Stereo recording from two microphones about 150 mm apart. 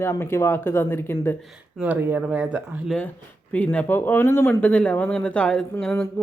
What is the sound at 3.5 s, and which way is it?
Speech, 10° left (ahead or behind).